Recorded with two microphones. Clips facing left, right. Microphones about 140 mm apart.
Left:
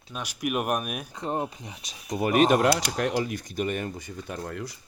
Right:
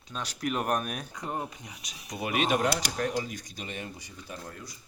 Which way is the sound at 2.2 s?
45° left (ahead or behind).